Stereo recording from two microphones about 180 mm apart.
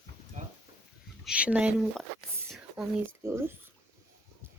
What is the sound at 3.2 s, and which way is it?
Speech, 15° right (ahead or behind).